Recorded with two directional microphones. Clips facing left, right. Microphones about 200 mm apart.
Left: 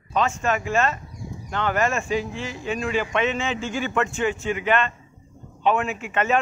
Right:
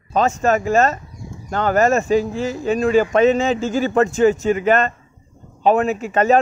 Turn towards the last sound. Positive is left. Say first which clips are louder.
# right 7 dB
turn(degrees=-40)  # may be behind; listen again after turning